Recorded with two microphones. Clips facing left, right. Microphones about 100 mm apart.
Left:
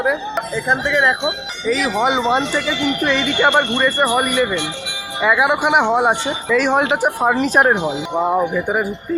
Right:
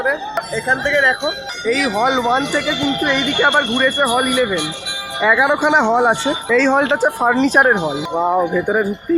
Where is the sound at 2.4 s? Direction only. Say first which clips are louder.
Right 1 dB; 15° right (ahead or behind).